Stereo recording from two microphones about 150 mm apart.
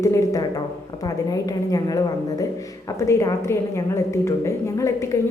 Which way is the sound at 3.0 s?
20° left (ahead or behind).